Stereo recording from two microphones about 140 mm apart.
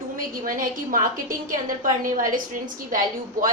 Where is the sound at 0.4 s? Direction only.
75° right (ahead or behind).